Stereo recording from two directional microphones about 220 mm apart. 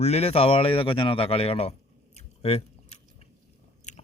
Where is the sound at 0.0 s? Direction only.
30° left (ahead or behind).